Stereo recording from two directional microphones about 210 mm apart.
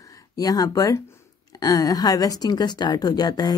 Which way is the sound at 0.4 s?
15° left (ahead or behind).